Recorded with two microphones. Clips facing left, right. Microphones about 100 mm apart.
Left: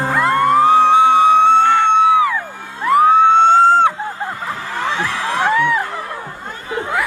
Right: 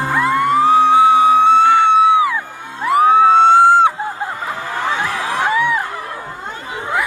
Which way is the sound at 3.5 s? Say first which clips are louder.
Right 1 dB; 10° right (ahead or behind).